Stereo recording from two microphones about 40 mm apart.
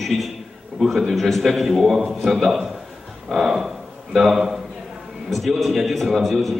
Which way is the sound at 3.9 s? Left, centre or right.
Right.